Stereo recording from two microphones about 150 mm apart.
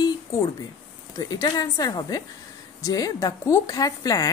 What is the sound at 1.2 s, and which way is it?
A woman's voice, 25° left (ahead or behind).